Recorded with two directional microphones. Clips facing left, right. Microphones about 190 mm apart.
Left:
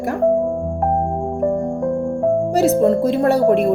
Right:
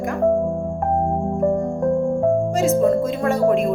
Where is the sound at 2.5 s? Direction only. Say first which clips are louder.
Left 2 dB; 35° left (ahead or behind).